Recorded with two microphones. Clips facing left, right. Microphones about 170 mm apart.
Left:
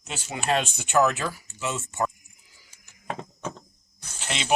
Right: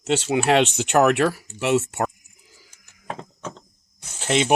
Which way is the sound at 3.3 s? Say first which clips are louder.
Even; 10° left (ahead or behind).